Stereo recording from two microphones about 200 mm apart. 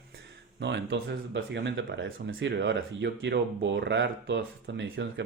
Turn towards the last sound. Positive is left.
turn(degrees=-60)  # may be behind; listen again after turning